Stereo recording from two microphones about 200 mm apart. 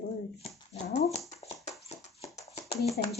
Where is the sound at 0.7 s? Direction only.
35° left (ahead or behind).